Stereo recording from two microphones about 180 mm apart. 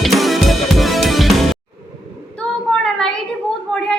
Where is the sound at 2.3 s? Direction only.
5° left (ahead or behind).